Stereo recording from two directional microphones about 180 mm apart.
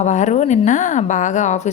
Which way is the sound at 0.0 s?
40° left (ahead or behind).